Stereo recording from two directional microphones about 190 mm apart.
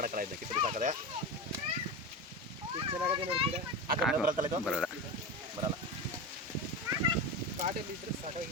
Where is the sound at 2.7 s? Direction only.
30° right (ahead or behind).